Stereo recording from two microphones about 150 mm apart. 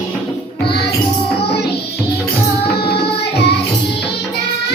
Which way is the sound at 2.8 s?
90° left.